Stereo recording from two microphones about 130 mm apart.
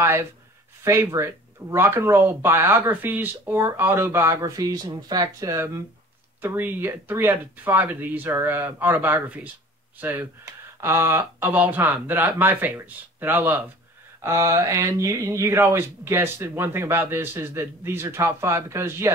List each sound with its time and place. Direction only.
0.0 s speech: 20° right (ahead or behind)